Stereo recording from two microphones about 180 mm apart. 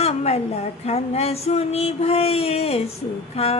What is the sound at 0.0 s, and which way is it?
Speech, 35° left (ahead or behind).